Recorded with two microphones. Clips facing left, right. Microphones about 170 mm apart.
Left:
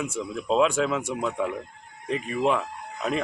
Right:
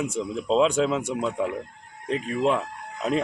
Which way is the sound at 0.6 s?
30° right (ahead or behind).